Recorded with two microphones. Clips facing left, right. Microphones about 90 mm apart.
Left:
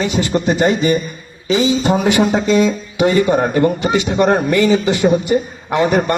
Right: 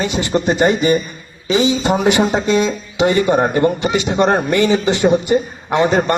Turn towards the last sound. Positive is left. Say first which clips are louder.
# even
turn(degrees=-20)  # may be behind; listen again after turning